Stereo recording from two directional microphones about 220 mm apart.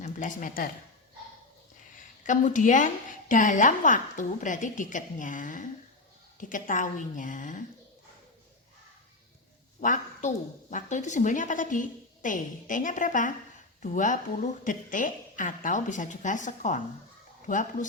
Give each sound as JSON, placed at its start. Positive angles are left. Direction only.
{"t": 0.0, "sound": "speech", "side_deg": 35}
{"t": 2.2, "sound": "a woman's voice", "side_deg": 35}
{"t": 9.8, "sound": "a woman's voice", "side_deg": 35}